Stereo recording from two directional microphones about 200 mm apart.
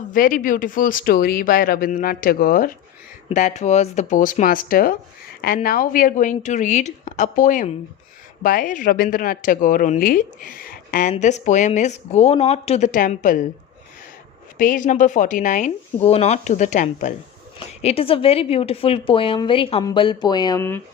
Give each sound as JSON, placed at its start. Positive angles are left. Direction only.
{"t": 0.1, "sound": "a woman's voice", "side_deg": 45}
{"t": 14.6, "sound": "a woman's voice", "side_deg": 40}